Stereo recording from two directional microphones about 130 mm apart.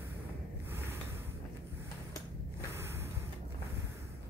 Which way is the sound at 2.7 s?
20° right (ahead or behind).